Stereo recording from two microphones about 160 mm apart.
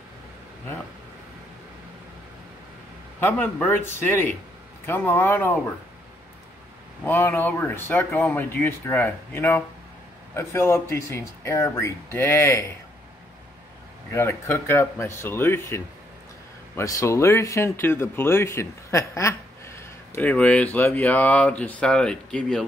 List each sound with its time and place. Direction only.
3.2 s speech: 10° left (ahead or behind)
7.1 s speech: 10° left (ahead or behind)
14.1 s speech: 15° left (ahead or behind)